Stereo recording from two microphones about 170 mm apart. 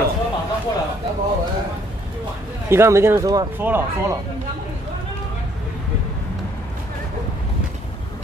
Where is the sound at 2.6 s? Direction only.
15° right (ahead or behind).